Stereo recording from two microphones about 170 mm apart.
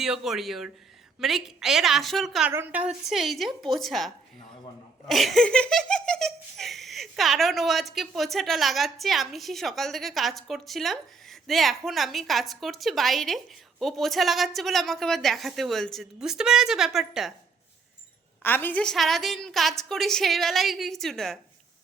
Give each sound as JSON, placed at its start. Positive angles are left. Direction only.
{"t": 0.0, "sound": "speech", "side_deg": 0}
{"t": 2.5, "sound": "speech", "side_deg": -10}
{"t": 18.4, "sound": "speech", "side_deg": 10}